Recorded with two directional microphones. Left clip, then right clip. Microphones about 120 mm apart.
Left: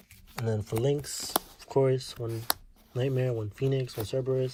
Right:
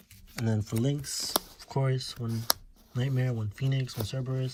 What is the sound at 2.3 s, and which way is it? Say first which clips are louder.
Speech: right 3 dB; centre (ahead or behind).